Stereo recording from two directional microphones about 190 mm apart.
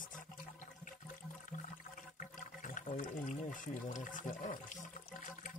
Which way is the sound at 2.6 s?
40° left (ahead or behind).